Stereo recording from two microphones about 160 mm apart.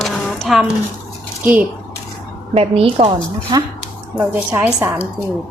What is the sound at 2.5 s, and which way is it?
A woman's voice, 40° right (ahead or behind).